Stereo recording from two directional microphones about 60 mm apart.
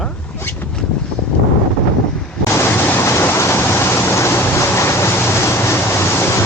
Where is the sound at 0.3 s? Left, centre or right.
Left.